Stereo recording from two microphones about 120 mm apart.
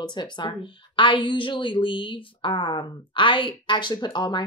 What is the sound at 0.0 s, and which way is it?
Speech, 40° left (ahead or behind).